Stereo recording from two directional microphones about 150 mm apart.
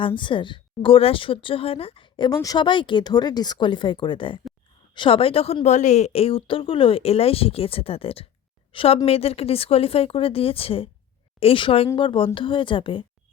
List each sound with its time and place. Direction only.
0.0 s a woman's voice: 35° left (ahead or behind)